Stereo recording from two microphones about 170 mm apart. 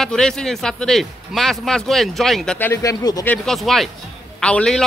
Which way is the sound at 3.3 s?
Centre (ahead or behind).